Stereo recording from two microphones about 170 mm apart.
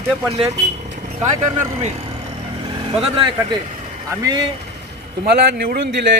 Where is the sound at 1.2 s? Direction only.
45° right (ahead or behind).